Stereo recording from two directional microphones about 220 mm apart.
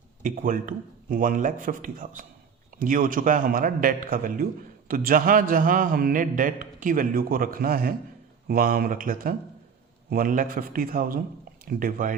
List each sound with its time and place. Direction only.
0.2 s a man's voice: 40° right (ahead or behind)